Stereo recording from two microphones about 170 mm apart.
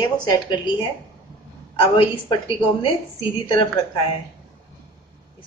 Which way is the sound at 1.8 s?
30° left (ahead or behind).